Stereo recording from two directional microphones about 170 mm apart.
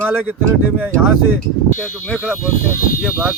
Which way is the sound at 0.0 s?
10° right (ahead or behind).